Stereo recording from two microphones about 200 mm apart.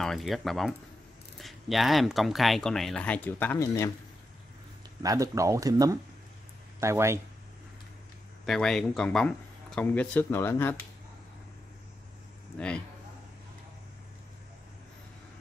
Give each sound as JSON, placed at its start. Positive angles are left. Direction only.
{"t": 0.0, "sound": "speech", "side_deg": 0}
{"t": 5.0, "sound": "speech", "side_deg": -15}
{"t": 8.5, "sound": "speech", "side_deg": 0}
{"t": 12.5, "sound": "speech", "side_deg": 5}